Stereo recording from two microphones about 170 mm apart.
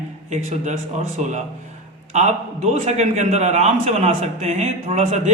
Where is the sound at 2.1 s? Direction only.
40° right (ahead or behind).